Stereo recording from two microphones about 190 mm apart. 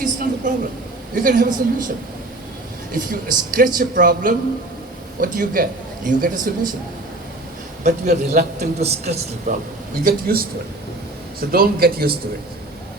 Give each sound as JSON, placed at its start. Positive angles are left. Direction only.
{"t": 0.0, "sound": "a sound", "side_deg": -45}
{"t": 1.1, "sound": "speech", "side_deg": -45}
{"t": 2.9, "sound": "speech", "side_deg": -45}
{"t": 8.1, "sound": "a man's voice", "side_deg": -35}
{"t": 10.0, "sound": "speech", "side_deg": -50}